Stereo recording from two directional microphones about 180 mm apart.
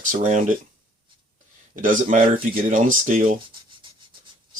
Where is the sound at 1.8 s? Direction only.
45° right (ahead or behind).